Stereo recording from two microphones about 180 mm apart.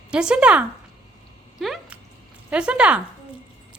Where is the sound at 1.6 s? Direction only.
Centre (ahead or behind).